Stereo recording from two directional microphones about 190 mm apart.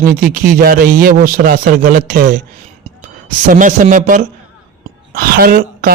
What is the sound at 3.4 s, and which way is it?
A man's voice, 40° right (ahead or behind).